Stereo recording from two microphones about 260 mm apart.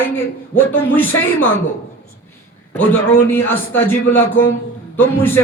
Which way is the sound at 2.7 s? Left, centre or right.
Centre.